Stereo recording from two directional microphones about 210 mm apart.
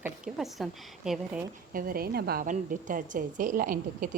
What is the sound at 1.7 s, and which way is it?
A woman's voice, 40° right (ahead or behind).